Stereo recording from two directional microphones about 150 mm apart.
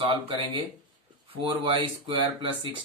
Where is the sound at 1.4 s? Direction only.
35° right (ahead or behind).